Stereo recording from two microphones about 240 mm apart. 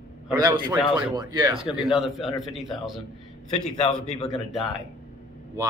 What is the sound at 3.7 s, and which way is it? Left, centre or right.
Speech, left.